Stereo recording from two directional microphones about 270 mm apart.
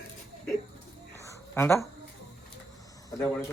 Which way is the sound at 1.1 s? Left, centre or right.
Centre.